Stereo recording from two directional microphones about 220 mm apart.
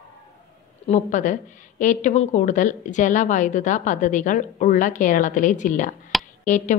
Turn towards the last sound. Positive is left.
turn(degrees=35)  # may be behind; listen again after turning